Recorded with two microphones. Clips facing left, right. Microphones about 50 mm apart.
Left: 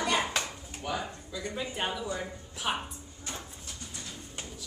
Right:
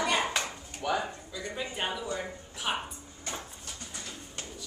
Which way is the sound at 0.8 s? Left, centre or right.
Right.